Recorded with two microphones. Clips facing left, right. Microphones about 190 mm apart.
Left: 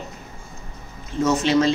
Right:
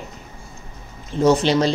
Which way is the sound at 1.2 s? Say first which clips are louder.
Right 2 dB; 35° right (ahead or behind).